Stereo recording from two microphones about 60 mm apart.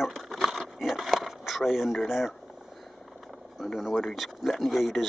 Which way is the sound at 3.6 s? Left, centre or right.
Centre.